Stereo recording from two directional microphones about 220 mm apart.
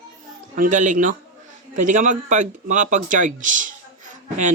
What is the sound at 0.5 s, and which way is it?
Speech, 35° right (ahead or behind).